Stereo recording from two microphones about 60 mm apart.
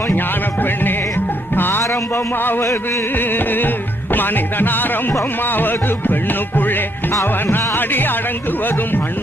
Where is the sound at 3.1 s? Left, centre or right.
Left.